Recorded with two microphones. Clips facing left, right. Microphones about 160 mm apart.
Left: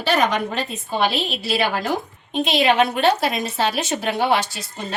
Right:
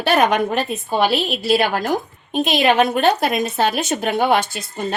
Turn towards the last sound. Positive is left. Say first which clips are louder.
# right 3 dB
turn(degrees=-50)  # may be behind; listen again after turning